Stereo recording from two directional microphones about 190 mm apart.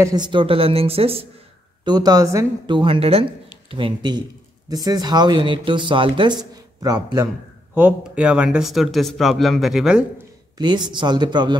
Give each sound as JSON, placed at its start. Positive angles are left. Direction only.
{"t": 0.0, "sound": "speech", "side_deg": -20}
{"t": 1.9, "sound": "speech", "side_deg": -20}
{"t": 7.7, "sound": "speech", "side_deg": -5}
{"t": 10.6, "sound": "speech", "side_deg": -25}